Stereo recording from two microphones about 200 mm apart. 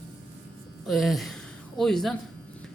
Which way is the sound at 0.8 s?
Centre (ahead or behind).